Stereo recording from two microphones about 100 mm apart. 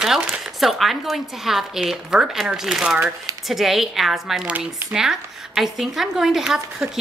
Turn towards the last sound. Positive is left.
turn(degrees=-5)  # may be behind; listen again after turning